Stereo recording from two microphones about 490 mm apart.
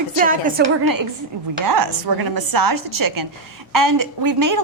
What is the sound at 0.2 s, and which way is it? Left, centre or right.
Speech, centre.